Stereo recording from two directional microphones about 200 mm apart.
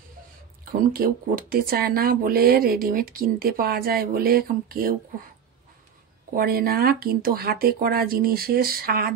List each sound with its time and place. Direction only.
0.7 s speech: 45° right (ahead or behind)
6.3 s speech: 50° right (ahead or behind)